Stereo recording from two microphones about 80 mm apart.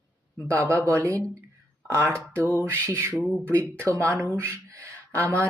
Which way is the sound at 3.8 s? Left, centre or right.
Right.